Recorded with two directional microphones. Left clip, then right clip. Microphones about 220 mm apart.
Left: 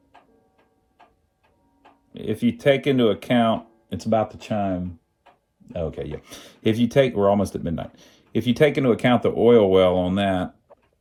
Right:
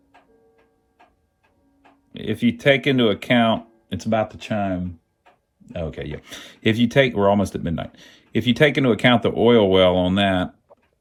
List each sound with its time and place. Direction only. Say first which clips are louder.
2.1 s speech: right 2 dB; 5° left (ahead or behind)
6.3 s speech: right 4 dB; 20° right (ahead or behind)
6.8 s speech: right 1 dB; 5° left (ahead or behind)